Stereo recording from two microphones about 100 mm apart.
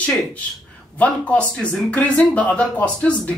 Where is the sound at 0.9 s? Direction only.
15° left (ahead or behind).